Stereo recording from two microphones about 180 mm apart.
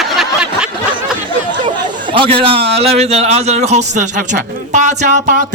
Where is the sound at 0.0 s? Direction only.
Centre (ahead or behind).